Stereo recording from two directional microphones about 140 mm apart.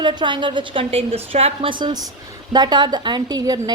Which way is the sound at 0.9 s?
45° right (ahead or behind).